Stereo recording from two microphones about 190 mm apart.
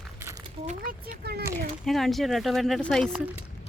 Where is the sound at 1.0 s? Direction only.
55° right (ahead or behind).